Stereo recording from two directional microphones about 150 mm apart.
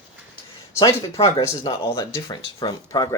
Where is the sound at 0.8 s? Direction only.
35° left (ahead or behind).